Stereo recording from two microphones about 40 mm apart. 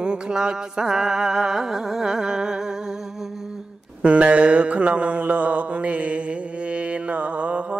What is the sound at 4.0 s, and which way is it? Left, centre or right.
Mantra, right.